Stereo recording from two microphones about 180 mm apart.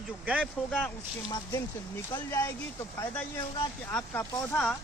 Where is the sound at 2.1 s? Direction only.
15° left (ahead or behind).